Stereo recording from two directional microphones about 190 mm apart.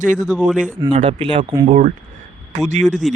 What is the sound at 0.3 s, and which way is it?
Speech, 5° right (ahead or behind).